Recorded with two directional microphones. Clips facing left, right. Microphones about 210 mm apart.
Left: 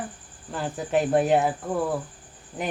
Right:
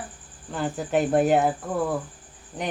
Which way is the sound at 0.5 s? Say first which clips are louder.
Right 1 dB; centre (ahead or behind).